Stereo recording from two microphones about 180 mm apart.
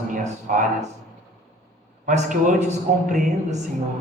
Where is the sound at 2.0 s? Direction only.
45° right (ahead or behind).